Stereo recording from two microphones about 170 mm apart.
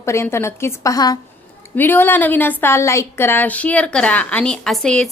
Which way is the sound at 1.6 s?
10° left (ahead or behind).